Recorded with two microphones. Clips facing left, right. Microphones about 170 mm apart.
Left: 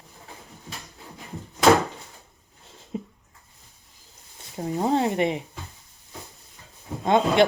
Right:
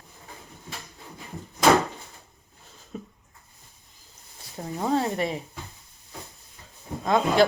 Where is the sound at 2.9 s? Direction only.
20° left (ahead or behind).